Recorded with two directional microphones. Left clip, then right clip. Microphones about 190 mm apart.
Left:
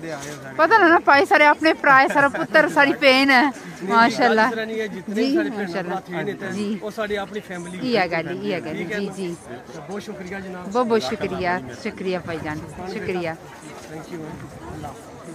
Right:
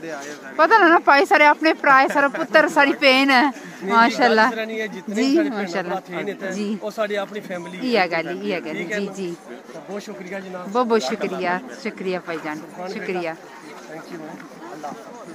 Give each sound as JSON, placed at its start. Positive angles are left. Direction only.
{"t": 0.0, "sound": "speech", "side_deg": -5}
{"t": 4.6, "sound": "a man's voice", "side_deg": -15}
{"t": 6.5, "sound": "speech", "side_deg": -5}
{"t": 6.8, "sound": "speech", "side_deg": -20}
{"t": 7.8, "sound": "speech", "side_deg": -5}
{"t": 8.7, "sound": "speech", "side_deg": -20}
{"t": 10.7, "sound": "speech", "side_deg": 0}